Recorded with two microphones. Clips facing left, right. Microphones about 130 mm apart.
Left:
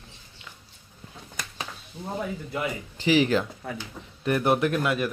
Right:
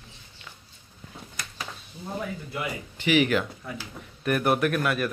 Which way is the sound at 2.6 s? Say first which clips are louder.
Left 2 dB; 30° left (ahead or behind).